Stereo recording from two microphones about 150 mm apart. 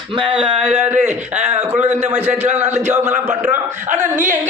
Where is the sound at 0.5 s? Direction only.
10° right (ahead or behind).